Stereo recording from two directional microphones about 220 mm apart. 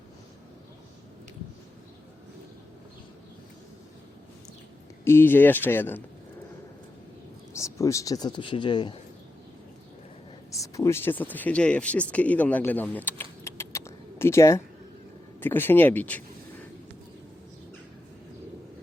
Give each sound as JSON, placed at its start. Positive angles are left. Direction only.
{"t": 5.0, "sound": "speech", "side_deg": 10}
{"t": 7.5, "sound": "speech", "side_deg": 15}
{"t": 10.5, "sound": "speech", "side_deg": 15}
{"t": 13.4, "sound": "typing", "side_deg": 10}
{"t": 15.4, "sound": "speech", "side_deg": 10}